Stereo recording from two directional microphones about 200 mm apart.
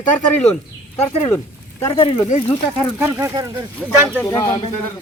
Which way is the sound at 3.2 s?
15° right (ahead or behind).